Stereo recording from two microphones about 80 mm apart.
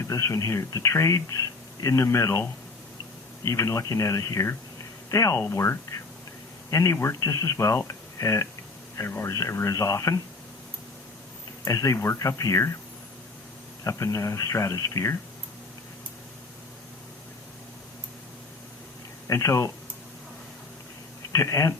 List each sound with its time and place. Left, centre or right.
0.0 s speech: left
3.4 s speech: left
11.6 s speech: left
13.8 s speech: left
19.3 s speech: left
21.3 s speech: left